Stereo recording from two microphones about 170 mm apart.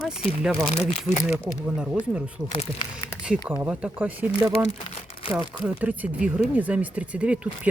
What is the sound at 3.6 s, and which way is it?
Speech, 5° right (ahead or behind).